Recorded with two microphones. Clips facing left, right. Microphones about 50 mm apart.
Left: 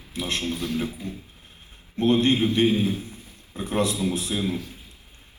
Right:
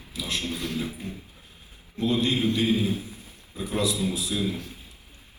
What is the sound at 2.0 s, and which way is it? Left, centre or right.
A man's voice, left.